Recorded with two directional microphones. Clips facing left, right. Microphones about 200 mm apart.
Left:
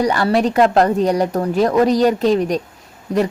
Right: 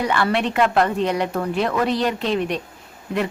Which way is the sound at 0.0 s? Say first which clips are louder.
Left 5 dB; 40° left (ahead or behind).